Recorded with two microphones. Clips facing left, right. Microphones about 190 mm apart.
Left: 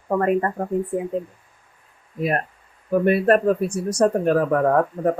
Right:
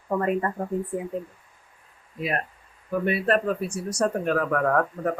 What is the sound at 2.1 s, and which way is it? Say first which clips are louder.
Speech: left 5 dB; 45° left (ahead or behind).